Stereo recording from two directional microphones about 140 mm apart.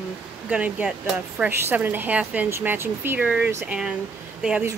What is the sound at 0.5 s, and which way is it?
A woman's voice, 10° right (ahead or behind).